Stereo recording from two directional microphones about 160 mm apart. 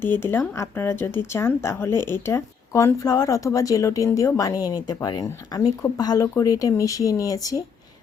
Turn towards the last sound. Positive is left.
turn(degrees=20)  # may be behind; listen again after turning